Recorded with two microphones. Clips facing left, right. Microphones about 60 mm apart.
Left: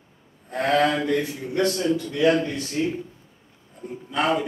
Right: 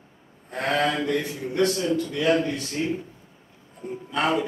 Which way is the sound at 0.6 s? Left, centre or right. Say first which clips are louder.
Left 3 dB; centre.